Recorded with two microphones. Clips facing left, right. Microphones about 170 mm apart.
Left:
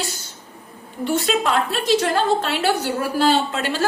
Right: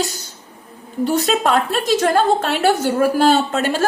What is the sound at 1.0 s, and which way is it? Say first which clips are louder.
A woman's voice: right 3 dB; 40° right (ahead or behind).